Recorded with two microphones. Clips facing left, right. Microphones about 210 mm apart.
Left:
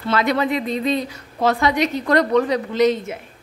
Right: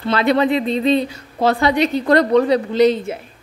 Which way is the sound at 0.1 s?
30° right (ahead or behind).